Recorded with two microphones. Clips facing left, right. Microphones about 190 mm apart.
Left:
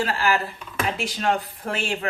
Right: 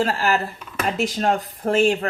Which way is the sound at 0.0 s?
45° right (ahead or behind).